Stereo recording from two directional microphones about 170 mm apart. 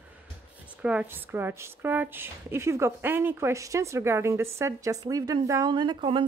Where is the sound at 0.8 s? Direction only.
5° right (ahead or behind).